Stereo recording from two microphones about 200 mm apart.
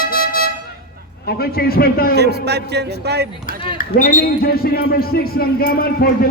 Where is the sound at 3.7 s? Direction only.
40° left (ahead or behind).